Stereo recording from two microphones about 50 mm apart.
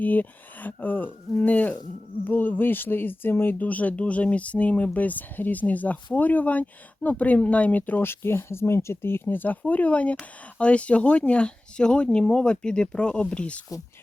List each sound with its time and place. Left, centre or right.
0.0 s speech: left
3.6 s speech: left
8.0 s speech: left